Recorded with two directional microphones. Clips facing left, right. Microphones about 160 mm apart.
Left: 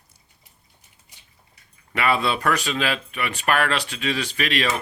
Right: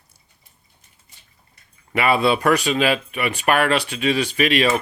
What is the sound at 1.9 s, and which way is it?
Speech, 15° right (ahead or behind).